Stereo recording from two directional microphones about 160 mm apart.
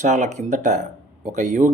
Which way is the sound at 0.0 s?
50° right (ahead or behind).